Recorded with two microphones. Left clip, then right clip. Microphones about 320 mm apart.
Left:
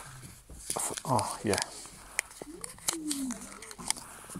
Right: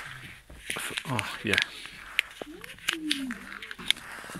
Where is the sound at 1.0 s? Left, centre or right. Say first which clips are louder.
Left 2 dB; centre.